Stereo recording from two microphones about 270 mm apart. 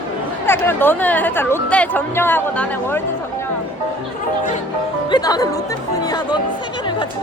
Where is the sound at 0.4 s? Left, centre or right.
Centre.